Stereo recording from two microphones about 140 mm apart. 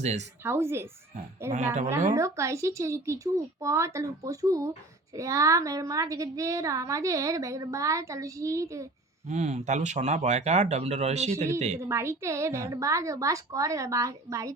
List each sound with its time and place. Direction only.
0.0 s speech: 55° right (ahead or behind)
0.4 s speech: 20° right (ahead or behind)
1.5 s speech: 55° right (ahead or behind)
2.1 s a woman's voice: 20° right (ahead or behind)
9.2 s speech: 55° right (ahead or behind)
11.8 s a woman's voice: 20° right (ahead or behind)